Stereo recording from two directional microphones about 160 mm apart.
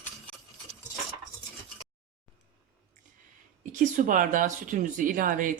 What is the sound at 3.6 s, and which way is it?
Speech, 55° right (ahead or behind).